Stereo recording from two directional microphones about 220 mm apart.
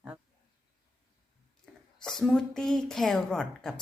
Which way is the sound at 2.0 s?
Centre (ahead or behind).